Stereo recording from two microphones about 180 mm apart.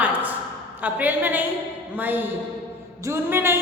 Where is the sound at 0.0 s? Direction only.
10° right (ahead or behind).